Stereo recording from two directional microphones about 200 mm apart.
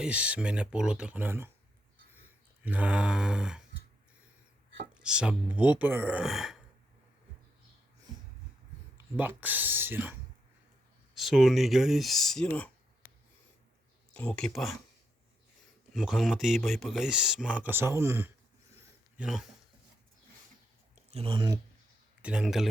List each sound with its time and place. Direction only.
0.0 s speech: 5° right (ahead or behind)
2.6 s speech: 5° right (ahead or behind)
5.0 s speech: 5° right (ahead or behind)
9.0 s speech: 10° right (ahead or behind); by 12.7 s 10° left (ahead or behind)
14.1 s speech: 5° left (ahead or behind)
15.9 s speech: centre (ahead or behind)
21.1 s speech: 30° right (ahead or behind)
22.2 s speech: 5° right (ahead or behind)